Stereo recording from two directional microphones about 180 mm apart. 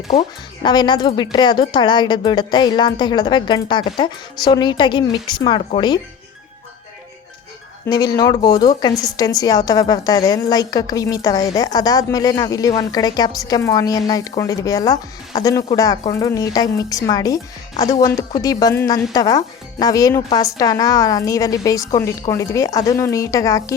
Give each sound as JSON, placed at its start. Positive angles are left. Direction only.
{"t": 0.6, "sound": "a woman's voice", "side_deg": 25}
{"t": 7.9, "sound": "a woman's voice", "side_deg": 20}